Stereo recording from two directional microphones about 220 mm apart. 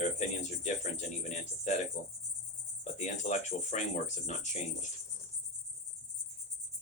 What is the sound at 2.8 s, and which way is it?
Speech, 30° left (ahead or behind).